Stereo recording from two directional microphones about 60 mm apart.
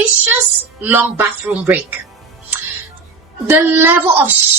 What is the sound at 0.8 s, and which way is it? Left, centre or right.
Speech, right.